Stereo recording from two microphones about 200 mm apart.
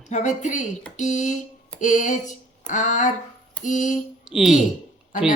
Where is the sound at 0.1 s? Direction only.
35° left (ahead or behind).